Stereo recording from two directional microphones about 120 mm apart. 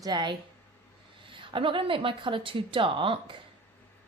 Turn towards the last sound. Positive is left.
turn(degrees=-45)  # may be behind; listen again after turning